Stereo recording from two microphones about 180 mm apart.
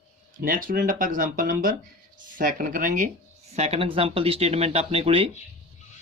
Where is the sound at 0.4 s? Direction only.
50° right (ahead or behind).